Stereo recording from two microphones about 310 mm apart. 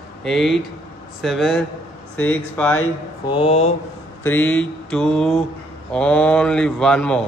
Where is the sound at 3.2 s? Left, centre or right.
Centre.